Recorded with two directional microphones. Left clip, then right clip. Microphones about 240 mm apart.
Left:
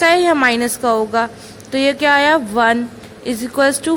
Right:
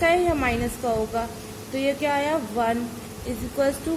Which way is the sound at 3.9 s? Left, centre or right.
Left.